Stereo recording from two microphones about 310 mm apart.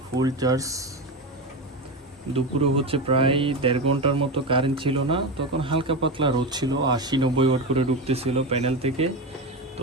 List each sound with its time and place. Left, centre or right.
0.2 s speech: centre
2.3 s speech: centre